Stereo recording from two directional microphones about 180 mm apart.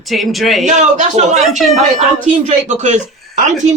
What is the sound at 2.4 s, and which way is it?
Speech, 40° right (ahead or behind).